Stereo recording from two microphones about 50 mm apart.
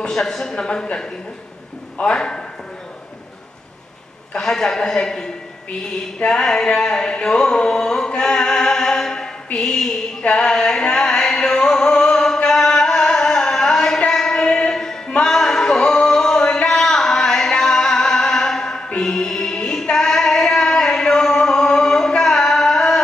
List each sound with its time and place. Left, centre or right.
0.0 s a man's voice: centre
2.1 s a man's voice: centre
4.3 s a man's voice: centre
6.4 s a sound: centre
9.6 s a man's voice: centre
10.2 s music: centre